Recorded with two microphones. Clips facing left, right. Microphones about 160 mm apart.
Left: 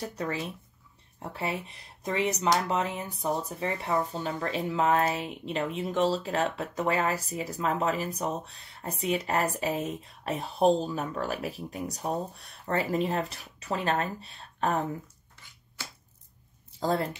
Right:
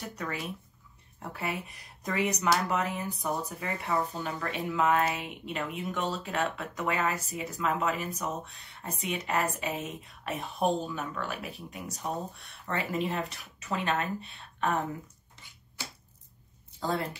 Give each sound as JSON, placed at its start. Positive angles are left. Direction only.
{"t": 0.0, "sound": "speech", "side_deg": 30}
{"t": 15.4, "sound": "finger snapping", "side_deg": -20}
{"t": 15.8, "sound": "a sound", "side_deg": -15}